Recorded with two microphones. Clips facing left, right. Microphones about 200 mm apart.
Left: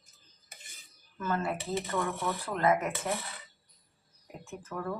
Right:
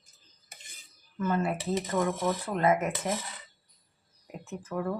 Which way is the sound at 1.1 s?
20° right (ahead or behind).